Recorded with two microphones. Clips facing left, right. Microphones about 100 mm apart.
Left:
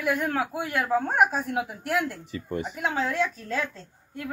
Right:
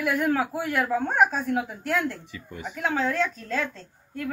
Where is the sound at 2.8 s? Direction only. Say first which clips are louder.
Right 2 dB; 5° left (ahead or behind).